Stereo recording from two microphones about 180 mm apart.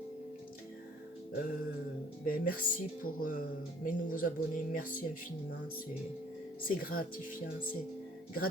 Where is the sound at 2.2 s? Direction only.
50° left (ahead or behind).